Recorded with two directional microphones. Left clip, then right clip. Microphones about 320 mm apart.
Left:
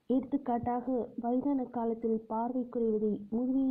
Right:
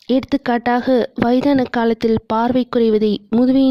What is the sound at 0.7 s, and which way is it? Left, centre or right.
Speech, right.